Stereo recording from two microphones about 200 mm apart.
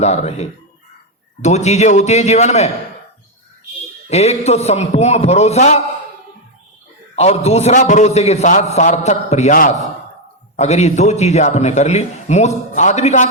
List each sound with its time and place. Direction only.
0.0 s a man's voice: 35° left (ahead or behind)
4.1 s a man's voice: 35° left (ahead or behind)
7.2 s a man's voice: 30° left (ahead or behind)